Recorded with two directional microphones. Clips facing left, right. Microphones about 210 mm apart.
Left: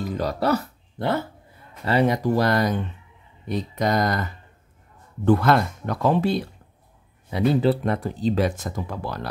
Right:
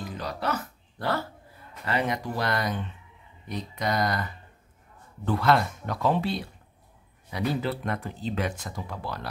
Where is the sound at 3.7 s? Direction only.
45° left (ahead or behind).